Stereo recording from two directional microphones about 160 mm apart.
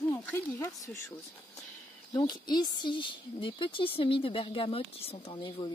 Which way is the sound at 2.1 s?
25° left (ahead or behind).